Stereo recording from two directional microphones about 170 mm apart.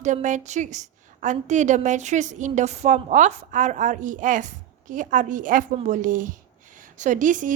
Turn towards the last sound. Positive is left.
turn(degrees=-50)  # may be behind; listen again after turning